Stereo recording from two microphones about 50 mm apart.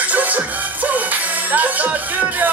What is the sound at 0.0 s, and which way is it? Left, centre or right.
Music, right.